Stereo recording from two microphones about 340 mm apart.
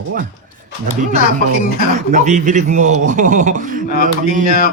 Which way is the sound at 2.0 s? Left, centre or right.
Right.